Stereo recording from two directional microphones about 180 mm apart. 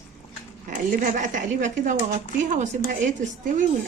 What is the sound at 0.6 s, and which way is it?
Speech, 45° right (ahead or behind).